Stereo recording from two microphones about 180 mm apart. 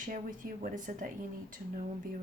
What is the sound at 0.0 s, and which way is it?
Speech, 45° right (ahead or behind).